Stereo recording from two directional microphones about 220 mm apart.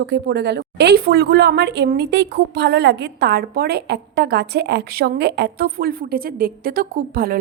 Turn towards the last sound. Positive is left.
turn(degrees=-40)  # may be behind; listen again after turning